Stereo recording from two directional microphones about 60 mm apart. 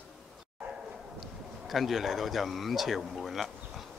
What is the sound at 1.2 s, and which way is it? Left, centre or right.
Speech, centre.